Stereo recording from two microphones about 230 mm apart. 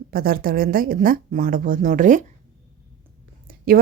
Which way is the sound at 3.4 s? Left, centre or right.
Right.